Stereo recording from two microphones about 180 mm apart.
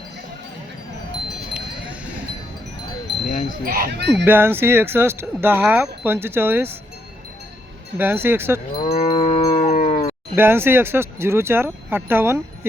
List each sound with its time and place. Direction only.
3.6 s speech: 55° right (ahead or behind); by 4.3 s 70° right (ahead or behind)
4.3 s speech: 10° right (ahead or behind)
7.9 s speech: 10° right (ahead or behind)
8.7 s cattle: 25° left (ahead or behind)
9.0 s livestock: 35° left (ahead or behind)
10.3 s speech: 10° right (ahead or behind)